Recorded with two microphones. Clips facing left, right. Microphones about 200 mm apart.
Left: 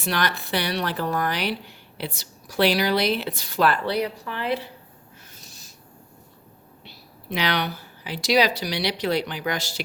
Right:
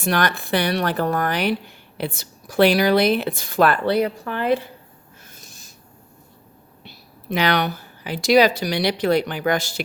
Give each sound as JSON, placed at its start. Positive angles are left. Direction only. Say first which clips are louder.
{"t": 0.0, "sound": "speech", "louder": "right 4 dB", "side_deg": -50}
{"t": 5.3, "sound": "owl", "louder": "right 1 dB", "side_deg": -50}
{"t": 6.8, "sound": "a woman's voice", "louder": "right 5 dB", "side_deg": -50}